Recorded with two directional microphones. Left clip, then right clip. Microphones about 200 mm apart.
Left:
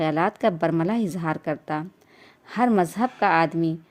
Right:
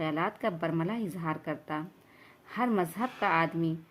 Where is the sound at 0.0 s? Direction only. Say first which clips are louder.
Left 9 dB; 40° left (ahead or behind).